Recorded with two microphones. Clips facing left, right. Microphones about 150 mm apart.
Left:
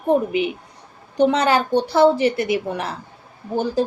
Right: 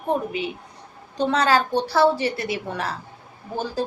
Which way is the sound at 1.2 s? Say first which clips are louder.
Left 3 dB; 20° left (ahead or behind).